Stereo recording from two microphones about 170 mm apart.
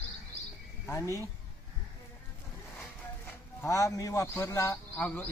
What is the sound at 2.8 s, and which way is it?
Speech, 15° left (ahead or behind).